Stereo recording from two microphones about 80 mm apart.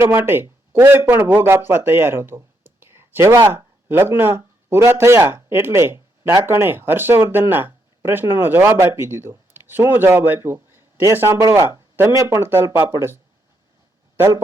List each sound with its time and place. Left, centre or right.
0.0 s a man's voice: right
11.3 s speech: right
12.5 s speech: right
14.2 s a man's voice: right